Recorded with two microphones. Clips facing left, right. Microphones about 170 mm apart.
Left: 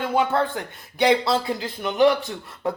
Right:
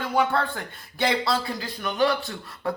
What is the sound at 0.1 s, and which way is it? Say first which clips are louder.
A woman's voice: left 1 dB; 20° left (ahead or behind).